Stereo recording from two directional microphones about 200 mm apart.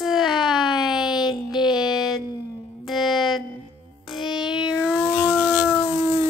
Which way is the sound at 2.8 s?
Centre (ahead or behind).